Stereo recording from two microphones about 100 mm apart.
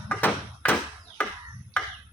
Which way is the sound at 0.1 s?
20° left (ahead or behind).